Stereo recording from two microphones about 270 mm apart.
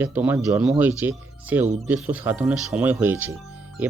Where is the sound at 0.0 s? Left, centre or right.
Centre.